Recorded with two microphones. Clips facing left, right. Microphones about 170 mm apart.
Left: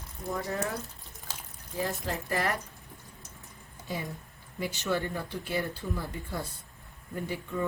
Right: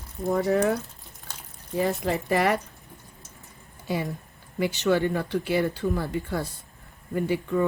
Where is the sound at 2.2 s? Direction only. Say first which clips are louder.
Right 8 dB; 70° right (ahead or behind).